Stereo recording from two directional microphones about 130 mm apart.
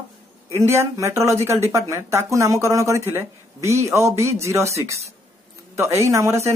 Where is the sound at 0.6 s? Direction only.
20° right (ahead or behind).